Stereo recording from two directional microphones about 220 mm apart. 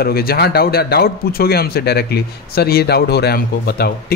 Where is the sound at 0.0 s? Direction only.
45° left (ahead or behind).